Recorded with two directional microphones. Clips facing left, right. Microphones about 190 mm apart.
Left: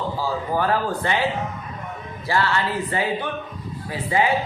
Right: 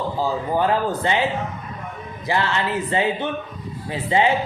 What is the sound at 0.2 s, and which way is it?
Speech, 20° right (ahead or behind).